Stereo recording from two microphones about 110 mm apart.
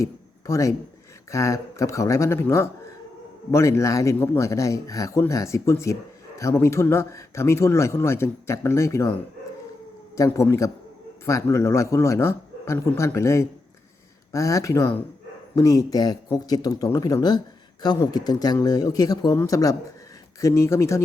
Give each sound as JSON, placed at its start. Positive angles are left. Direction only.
{"t": 0.0, "sound": "a sound", "side_deg": 30}
{"t": 1.3, "sound": "a man's voice", "side_deg": 25}
{"t": 10.2, "sound": "a man's voice", "side_deg": 25}